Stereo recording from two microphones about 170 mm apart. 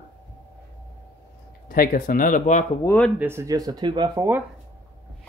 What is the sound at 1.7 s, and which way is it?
Speech, 60° left (ahead or behind).